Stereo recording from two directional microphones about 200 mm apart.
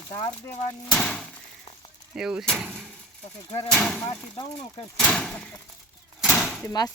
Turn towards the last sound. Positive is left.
turn(degrees=0)  # may be behind; listen again after turning